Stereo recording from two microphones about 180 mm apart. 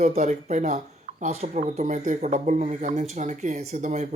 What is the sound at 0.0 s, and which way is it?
Speech, 40° right (ahead or behind).